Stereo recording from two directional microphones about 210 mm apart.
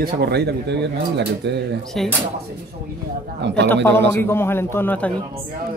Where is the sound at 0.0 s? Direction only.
50° right (ahead or behind).